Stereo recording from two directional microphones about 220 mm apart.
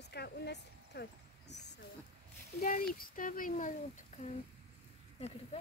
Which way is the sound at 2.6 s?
40° left (ahead or behind).